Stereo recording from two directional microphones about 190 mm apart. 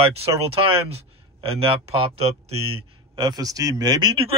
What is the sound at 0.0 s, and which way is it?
A man's voice, 30° right (ahead or behind).